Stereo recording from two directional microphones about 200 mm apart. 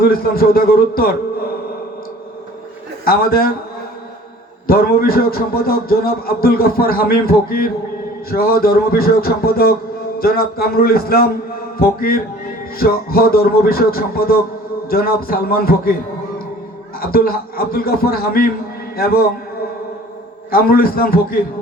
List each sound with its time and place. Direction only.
0.0 s a man's voice: 50° left (ahead or behind)
3.0 s a man's voice: 50° left (ahead or behind)
4.6 s a man's voice: 50° left (ahead or behind)
17.0 s a man's voice: 50° left (ahead or behind)
20.5 s a man's voice: 50° left (ahead or behind)